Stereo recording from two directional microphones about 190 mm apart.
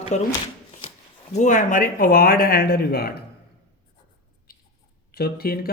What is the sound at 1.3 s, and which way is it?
Speech, 40° left (ahead or behind).